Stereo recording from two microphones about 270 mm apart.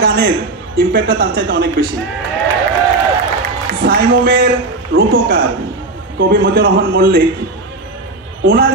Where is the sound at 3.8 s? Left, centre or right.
Right.